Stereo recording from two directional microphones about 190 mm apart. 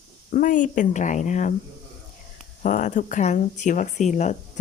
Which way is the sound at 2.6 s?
45° left (ahead or behind).